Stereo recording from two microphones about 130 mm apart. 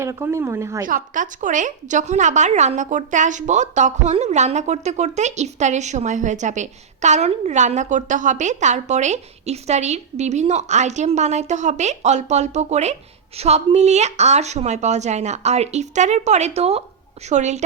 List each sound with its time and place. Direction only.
0.0 s speech: 20° right (ahead or behind)
0.9 s a woman's voice: 85° right; by 17.6 s 65° right (ahead or behind)